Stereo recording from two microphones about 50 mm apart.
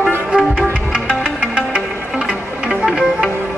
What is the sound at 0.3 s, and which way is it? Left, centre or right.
Music, centre.